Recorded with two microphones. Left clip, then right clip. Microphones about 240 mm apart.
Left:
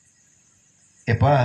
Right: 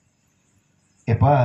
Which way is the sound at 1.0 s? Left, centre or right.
Left.